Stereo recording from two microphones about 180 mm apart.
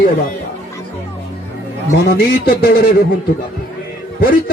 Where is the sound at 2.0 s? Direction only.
60° left (ahead or behind).